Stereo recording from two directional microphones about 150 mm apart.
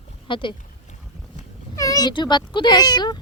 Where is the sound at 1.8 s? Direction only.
25° left (ahead or behind).